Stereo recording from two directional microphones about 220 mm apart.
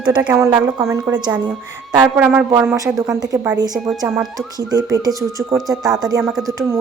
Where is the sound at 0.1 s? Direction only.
15° right (ahead or behind).